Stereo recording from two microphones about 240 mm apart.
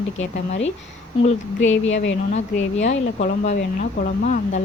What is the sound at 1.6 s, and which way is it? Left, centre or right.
Speech, left.